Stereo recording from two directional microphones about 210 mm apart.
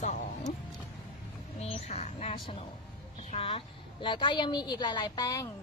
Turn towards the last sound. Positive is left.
turn(degrees=15)  # may be behind; listen again after turning